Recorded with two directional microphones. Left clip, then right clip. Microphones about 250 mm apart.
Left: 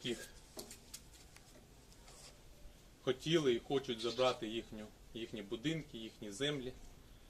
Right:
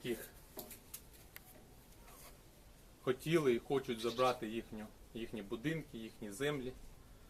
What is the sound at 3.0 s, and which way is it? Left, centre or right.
Speech, centre.